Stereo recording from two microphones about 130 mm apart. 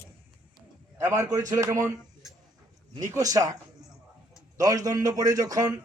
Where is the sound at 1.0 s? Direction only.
20° right (ahead or behind).